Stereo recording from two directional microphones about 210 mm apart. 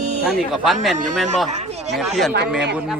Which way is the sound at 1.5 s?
30° right (ahead or behind).